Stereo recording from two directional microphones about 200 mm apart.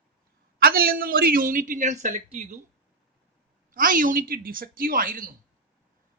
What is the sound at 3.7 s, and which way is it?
A woman's voice, 45° right (ahead or behind).